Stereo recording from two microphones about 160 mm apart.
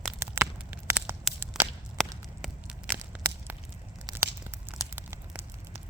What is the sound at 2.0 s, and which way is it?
Walk, centre (ahead or behind).